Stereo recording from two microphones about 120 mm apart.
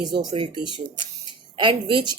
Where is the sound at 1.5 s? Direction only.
40° right (ahead or behind).